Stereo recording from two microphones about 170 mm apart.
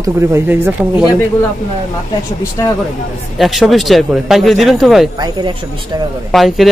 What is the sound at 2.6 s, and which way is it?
Speech, 20° left (ahead or behind).